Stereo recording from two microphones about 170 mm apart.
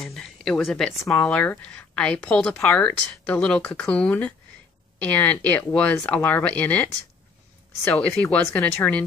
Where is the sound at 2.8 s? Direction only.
5° left (ahead or behind).